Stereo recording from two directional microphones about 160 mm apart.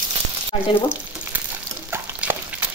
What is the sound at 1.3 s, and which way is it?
Stir, 10° right (ahead or behind).